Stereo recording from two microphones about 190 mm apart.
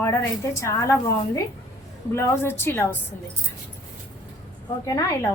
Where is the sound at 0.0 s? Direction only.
15° left (ahead or behind).